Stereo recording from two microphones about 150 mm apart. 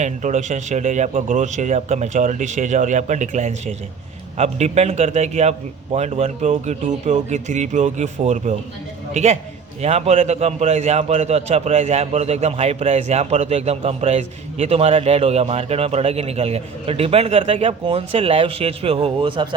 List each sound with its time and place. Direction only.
0.0 s a man's voice: 50° right (ahead or behind); by 19.5 s 35° right (ahead or behind)